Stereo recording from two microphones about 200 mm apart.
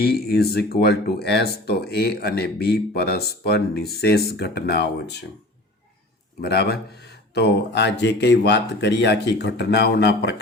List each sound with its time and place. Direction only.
0.0 s speech: 50° left (ahead or behind)
6.4 s speech: 55° left (ahead or behind)